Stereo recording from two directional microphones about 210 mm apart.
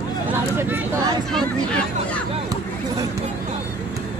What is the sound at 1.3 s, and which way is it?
Chatter, 5° left (ahead or behind).